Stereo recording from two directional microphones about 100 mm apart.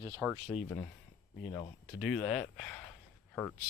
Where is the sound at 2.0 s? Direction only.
Centre (ahead or behind).